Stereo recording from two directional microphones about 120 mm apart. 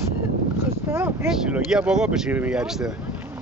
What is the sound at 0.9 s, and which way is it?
Speech, 20° right (ahead or behind).